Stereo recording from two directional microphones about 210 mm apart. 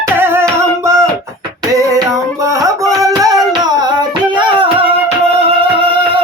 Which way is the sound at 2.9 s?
15° right (ahead or behind).